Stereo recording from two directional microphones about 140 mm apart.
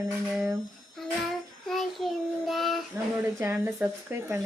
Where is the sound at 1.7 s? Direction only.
Centre (ahead or behind).